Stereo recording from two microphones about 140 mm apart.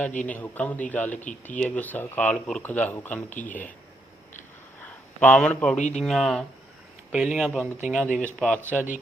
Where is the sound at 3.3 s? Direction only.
65° left (ahead or behind).